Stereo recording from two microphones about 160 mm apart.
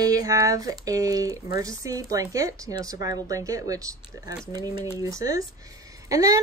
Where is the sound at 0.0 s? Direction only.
20° right (ahead or behind).